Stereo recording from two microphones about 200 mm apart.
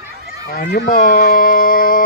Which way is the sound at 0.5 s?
45° left (ahead or behind).